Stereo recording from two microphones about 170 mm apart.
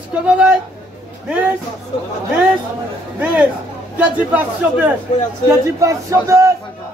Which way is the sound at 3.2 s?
10° right (ahead or behind).